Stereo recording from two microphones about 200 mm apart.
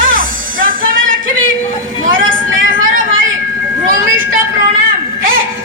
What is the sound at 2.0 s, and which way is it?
Vehicle, 45° right (ahead or behind).